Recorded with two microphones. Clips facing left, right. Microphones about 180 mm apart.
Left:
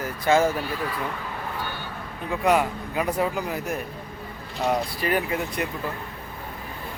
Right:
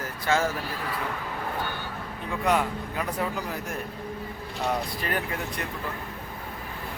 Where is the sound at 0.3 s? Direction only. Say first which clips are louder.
Left 5 dB; 15° left (ahead or behind).